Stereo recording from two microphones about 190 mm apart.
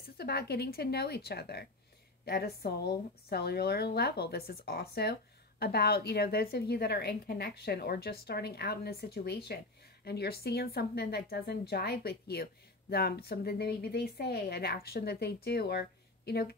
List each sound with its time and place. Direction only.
0.2 s a woman's voice: 55° left (ahead or behind)